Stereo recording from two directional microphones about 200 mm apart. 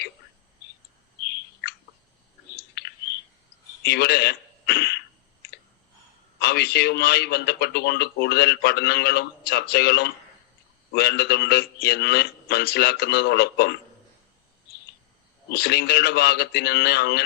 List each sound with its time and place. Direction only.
1.2 s bird: 55° left (ahead or behind)
3.8 s a sound: 55° left (ahead or behind)
6.4 s a man's voice: 55° left (ahead or behind)
15.4 s a man's voice: 55° left (ahead or behind)